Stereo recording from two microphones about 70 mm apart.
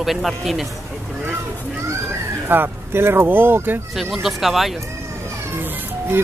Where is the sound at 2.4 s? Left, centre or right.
Right.